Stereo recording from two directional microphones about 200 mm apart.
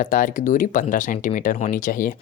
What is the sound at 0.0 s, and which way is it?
Speech, 40° left (ahead or behind).